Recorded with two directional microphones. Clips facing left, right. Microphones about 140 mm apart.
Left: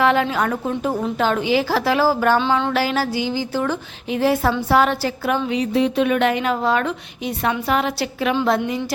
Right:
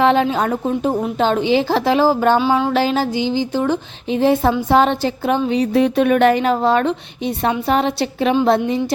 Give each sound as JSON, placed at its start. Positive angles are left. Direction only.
{"t": 0.0, "sound": "a woman's voice", "side_deg": -25}
{"t": 2.5, "sound": "a sound", "side_deg": -10}
{"t": 2.7, "sound": "a woman's voice", "side_deg": -25}
{"t": 5.7, "sound": "a woman's voice", "side_deg": -50}